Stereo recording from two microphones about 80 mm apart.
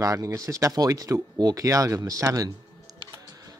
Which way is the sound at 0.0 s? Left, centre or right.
Right.